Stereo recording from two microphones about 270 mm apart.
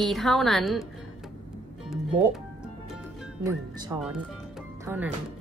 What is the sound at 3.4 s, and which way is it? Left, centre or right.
Speech, centre.